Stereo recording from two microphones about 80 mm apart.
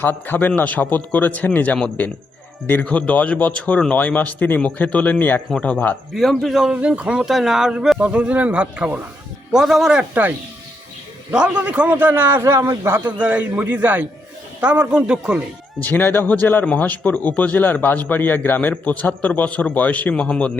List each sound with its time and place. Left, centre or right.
0.0 s speech: left
5.5 s speech: centre
9.5 s a man's voice: centre; by 12.4 s right
12.4 s speech: right
13.1 s speech: centre
15.8 s speech: left